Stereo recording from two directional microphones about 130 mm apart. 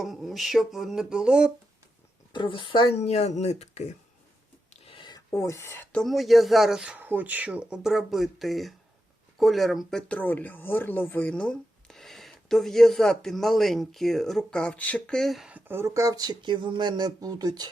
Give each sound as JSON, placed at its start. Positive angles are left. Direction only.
{"t": 0.0, "sound": "speech", "side_deg": 0}
{"t": 2.3, "sound": "speech", "side_deg": 35}
{"t": 2.9, "sound": "speech", "side_deg": 55}
{"t": 4.9, "sound": "speech", "side_deg": 35}